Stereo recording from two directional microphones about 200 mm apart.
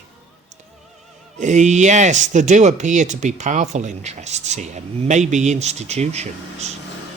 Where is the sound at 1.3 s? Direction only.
35° right (ahead or behind).